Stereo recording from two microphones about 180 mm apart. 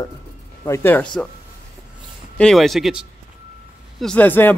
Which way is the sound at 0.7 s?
15° left (ahead or behind).